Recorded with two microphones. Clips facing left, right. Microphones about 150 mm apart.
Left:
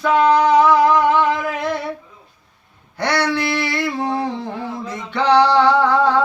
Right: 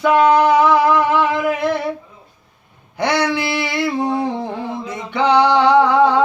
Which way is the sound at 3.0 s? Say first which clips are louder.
Right 1 dB; 15° right (ahead or behind).